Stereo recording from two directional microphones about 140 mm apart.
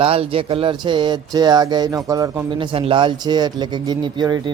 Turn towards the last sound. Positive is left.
turn(degrees=-30)  # may be behind; listen again after turning